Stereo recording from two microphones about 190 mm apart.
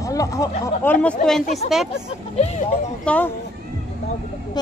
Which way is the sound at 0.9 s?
5° left (ahead or behind).